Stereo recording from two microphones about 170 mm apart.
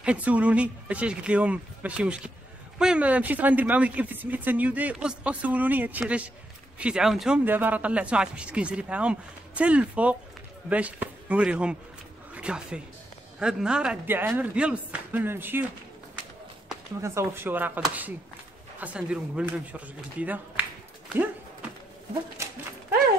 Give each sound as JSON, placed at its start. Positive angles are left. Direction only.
{"t": 0.0, "sound": "speech", "side_deg": -10}
{"t": 17.0, "sound": "speech", "side_deg": -15}
{"t": 22.4, "sound": "dog", "side_deg": -15}